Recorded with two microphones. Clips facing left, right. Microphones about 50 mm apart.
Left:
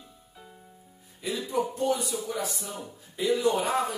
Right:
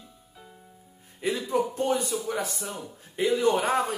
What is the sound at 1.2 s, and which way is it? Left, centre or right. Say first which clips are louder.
Speech: right 3 dB; right.